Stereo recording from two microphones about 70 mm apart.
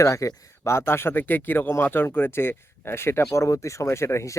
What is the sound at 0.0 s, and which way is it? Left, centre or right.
Speech, left.